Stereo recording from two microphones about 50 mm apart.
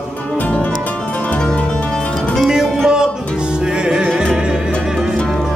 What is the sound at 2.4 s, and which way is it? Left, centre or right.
Music, centre.